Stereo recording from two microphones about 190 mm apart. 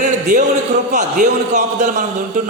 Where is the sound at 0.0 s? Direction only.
40° right (ahead or behind).